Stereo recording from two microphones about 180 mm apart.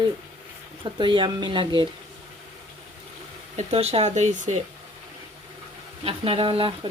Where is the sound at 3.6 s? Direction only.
35° right (ahead or behind).